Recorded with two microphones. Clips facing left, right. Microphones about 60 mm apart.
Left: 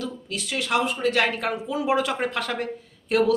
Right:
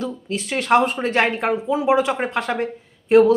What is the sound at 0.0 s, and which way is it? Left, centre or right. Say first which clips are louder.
A woman's voice: right 5 dB; right.